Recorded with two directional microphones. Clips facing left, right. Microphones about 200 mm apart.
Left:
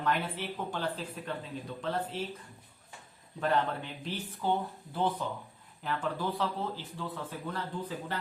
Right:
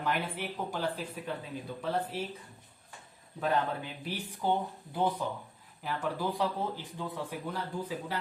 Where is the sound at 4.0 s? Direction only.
10° right (ahead or behind).